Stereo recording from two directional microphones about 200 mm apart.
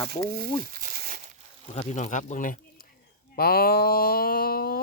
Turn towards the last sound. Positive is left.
turn(degrees=50)  # may be behind; listen again after turning